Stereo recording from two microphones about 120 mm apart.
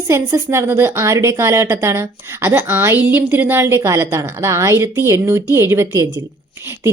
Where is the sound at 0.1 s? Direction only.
25° right (ahead or behind).